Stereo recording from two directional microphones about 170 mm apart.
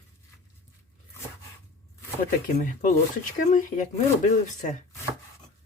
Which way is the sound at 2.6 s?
50° left (ahead or behind).